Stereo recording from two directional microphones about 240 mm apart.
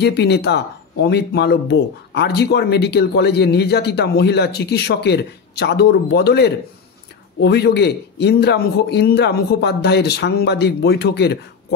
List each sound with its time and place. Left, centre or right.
0.0 s speech: left